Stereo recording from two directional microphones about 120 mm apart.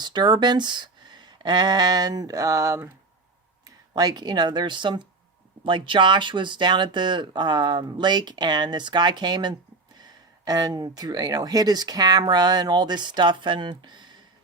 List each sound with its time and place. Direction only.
0.0 s speech: 40° right (ahead or behind)